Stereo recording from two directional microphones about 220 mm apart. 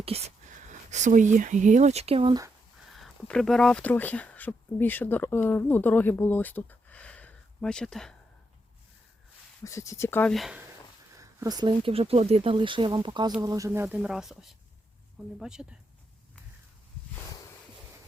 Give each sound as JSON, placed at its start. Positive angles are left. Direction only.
{"t": 0.0, "sound": "speech", "side_deg": -30}
{"t": 2.9, "sound": "speech", "side_deg": 0}
{"t": 9.6, "sound": "speech", "side_deg": 15}
{"t": 11.2, "sound": "speech", "side_deg": -15}